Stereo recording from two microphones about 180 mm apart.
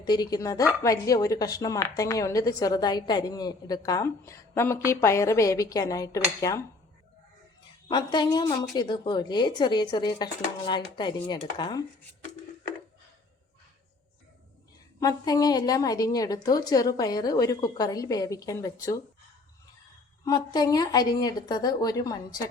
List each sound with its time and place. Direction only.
0.0 s a woman's voice: 20° left (ahead or behind)
7.9 s a woman's voice: 25° left (ahead or behind)
15.0 s a woman's voice: 20° left (ahead or behind)
20.2 s a woman's voice: 20° left (ahead or behind)